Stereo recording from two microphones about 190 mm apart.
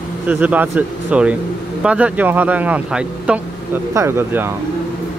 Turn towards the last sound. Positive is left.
turn(degrees=-10)  # may be behind; listen again after turning